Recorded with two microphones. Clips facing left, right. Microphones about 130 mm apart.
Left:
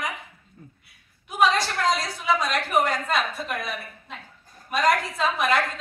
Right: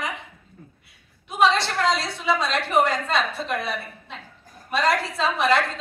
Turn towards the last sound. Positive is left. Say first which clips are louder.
# right 2 dB
turn(degrees=-30)  # may be behind; listen again after turning